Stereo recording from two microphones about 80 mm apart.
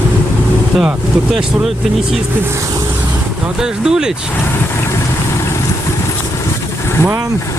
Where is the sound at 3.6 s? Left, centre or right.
Centre.